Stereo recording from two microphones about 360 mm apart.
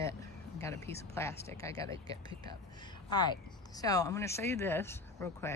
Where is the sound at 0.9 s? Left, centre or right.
Centre.